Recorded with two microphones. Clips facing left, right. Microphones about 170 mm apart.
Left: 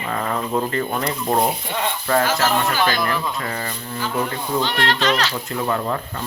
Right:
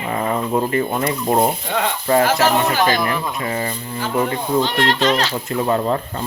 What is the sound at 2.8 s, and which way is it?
Speech, 20° right (ahead or behind).